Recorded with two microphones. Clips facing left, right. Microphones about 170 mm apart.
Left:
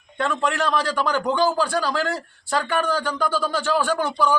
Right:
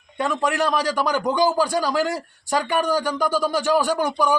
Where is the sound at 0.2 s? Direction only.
10° right (ahead or behind).